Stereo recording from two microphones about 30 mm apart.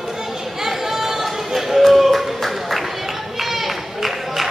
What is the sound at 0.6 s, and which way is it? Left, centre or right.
Chatter, centre.